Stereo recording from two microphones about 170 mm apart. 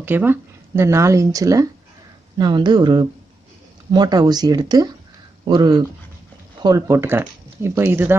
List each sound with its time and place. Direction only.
0.0 s speech: 10° right (ahead or behind)